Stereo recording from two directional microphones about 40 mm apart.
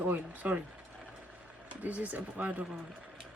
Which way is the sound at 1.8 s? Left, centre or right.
Right.